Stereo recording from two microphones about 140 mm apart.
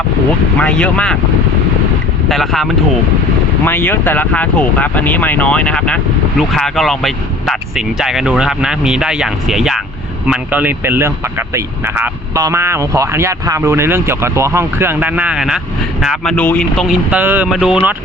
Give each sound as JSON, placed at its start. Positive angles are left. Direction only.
{"t": 0.6, "sound": "speech", "side_deg": 10}
{"t": 2.3, "sound": "speech", "side_deg": 0}
{"t": 3.6, "sound": "speech", "side_deg": 15}
{"t": 16.3, "sound": "speech", "side_deg": 10}
{"t": 17.1, "sound": "speech", "side_deg": -10}